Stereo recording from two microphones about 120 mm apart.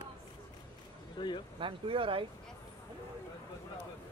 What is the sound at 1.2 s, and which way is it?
Speech, 40° left (ahead or behind).